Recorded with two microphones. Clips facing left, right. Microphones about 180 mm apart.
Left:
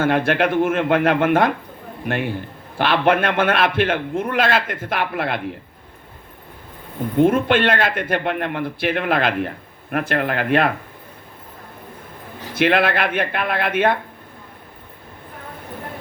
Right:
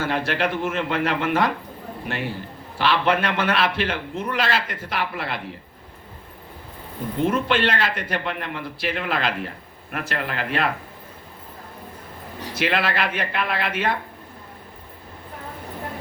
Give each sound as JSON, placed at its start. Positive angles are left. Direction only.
{"t": 0.0, "sound": "a man's voice", "side_deg": 50}
{"t": 7.2, "sound": "a man's voice", "side_deg": 50}
{"t": 12.5, "sound": "a man's voice", "side_deg": 55}